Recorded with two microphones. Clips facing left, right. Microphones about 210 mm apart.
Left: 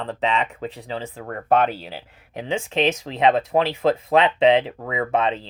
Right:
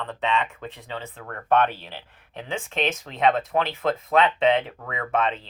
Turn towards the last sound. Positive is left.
turn(degrees=30)  # may be behind; listen again after turning